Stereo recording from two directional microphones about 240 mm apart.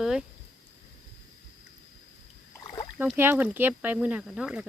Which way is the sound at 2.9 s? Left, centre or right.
Centre.